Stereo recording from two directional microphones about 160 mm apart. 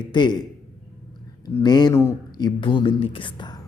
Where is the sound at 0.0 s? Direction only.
30° left (ahead or behind).